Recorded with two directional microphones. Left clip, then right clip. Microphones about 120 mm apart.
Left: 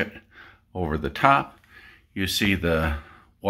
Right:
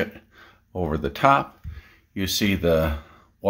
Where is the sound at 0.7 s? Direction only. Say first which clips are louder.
Right 1 dB; 25° right (ahead or behind).